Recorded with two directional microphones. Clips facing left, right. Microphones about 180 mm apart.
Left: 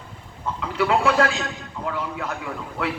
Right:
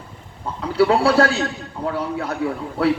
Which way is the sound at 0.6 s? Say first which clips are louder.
Right 5 dB; 35° right (ahead or behind).